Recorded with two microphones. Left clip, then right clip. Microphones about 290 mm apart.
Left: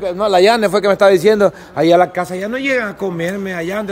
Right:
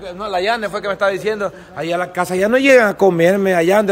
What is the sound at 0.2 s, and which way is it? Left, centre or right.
A man's voice, left.